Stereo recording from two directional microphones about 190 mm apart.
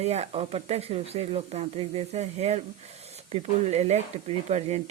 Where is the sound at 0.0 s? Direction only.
35° right (ahead or behind).